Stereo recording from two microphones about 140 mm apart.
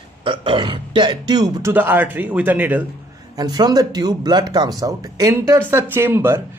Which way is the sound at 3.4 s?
30° right (ahead or behind).